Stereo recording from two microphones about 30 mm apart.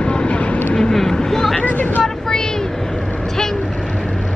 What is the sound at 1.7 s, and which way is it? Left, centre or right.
Speech, left.